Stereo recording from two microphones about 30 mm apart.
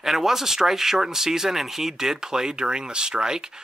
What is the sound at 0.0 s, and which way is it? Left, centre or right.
Speech, centre.